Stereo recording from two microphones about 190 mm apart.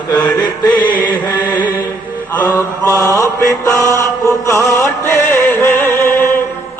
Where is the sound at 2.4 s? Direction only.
15° left (ahead or behind).